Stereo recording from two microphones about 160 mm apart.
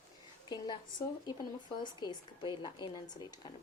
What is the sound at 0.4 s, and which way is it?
Speech, 25° left (ahead or behind).